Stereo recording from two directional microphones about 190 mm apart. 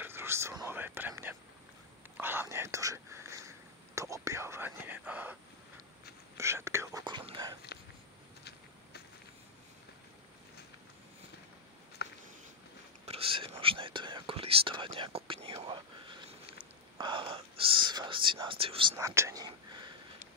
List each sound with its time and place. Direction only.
0.0 s whispering: 10° right (ahead or behind)
2.1 s speech: 10° right (ahead or behind)
12.0 s a sound: 60° left (ahead or behind)
13.0 s speech: 30° right (ahead or behind)
18.9 s speech: 15° right (ahead or behind)